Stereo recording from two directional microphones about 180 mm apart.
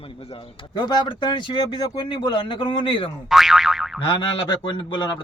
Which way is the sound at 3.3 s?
Centre (ahead or behind).